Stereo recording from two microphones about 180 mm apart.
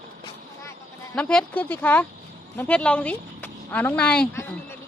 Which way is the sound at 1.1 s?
5° left (ahead or behind).